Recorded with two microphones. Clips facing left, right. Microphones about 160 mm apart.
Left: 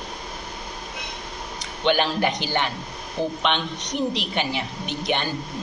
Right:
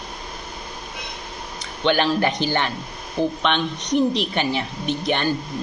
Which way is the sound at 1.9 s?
15° left (ahead or behind).